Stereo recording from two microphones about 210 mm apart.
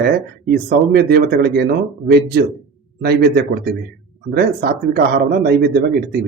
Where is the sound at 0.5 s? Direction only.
50° right (ahead or behind).